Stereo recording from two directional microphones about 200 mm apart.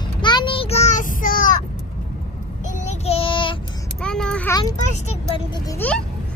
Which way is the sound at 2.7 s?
35° left (ahead or behind).